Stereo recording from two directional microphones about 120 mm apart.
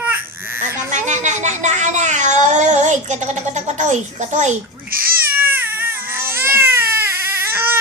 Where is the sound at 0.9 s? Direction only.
90° right.